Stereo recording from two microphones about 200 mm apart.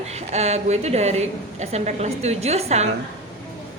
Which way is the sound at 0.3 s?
30° right (ahead or behind).